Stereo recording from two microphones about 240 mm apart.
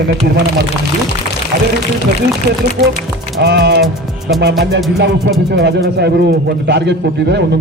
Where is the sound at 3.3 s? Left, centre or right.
Right.